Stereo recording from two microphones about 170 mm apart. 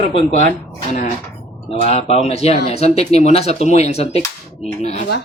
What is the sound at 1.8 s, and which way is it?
Speech, 35° left (ahead or behind).